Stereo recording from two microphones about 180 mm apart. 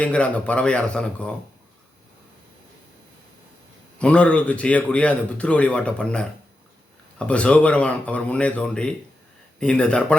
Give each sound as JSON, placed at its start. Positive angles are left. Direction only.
{"t": 0.0, "sound": "a man's voice", "side_deg": 5}
{"t": 3.9, "sound": "a man's voice", "side_deg": 5}